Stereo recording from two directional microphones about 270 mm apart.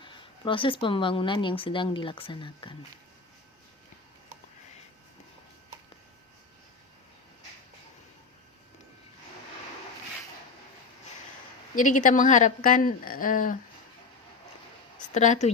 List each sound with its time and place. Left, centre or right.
0.0 s speech: centre
11.7 s speech: left
15.1 s speech: left